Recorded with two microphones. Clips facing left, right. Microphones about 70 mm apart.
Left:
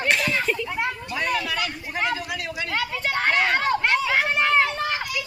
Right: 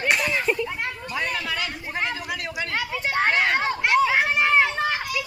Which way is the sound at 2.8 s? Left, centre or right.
Centre.